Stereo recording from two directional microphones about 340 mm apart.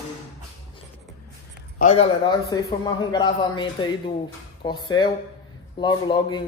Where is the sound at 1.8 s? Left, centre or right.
Centre.